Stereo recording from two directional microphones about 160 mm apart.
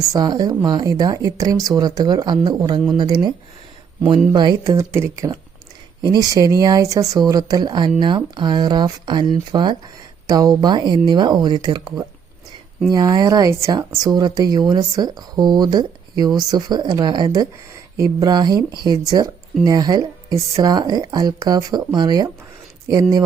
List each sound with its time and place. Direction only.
0.1 s speech: 25° right (ahead or behind)